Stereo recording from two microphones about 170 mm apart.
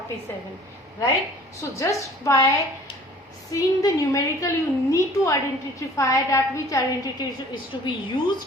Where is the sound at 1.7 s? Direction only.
15° left (ahead or behind).